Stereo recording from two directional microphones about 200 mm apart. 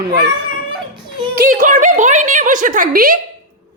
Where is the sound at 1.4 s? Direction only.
40° right (ahead or behind).